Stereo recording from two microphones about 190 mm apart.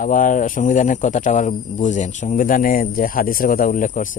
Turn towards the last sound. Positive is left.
turn(degrees=45)  # may be behind; listen again after turning